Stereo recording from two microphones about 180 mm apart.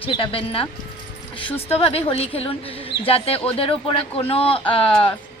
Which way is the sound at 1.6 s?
35° left (ahead or behind).